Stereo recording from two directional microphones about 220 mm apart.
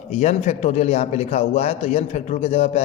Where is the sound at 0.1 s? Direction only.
30° left (ahead or behind).